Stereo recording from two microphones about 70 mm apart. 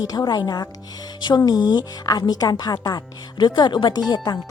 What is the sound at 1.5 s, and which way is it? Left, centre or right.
A woman's voice, left.